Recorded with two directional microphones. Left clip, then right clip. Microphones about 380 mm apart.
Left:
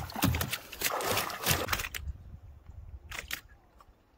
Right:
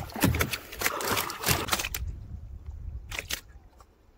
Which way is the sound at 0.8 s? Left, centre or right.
Centre.